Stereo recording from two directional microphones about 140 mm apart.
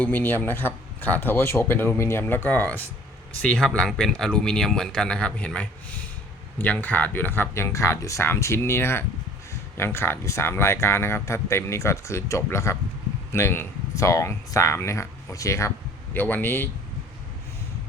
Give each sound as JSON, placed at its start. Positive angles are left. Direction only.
{"t": 0.0, "sound": "speech", "side_deg": 15}